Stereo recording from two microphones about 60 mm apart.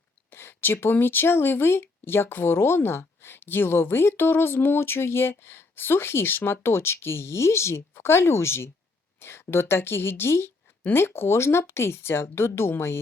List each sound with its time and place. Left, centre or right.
0.3 s speech: left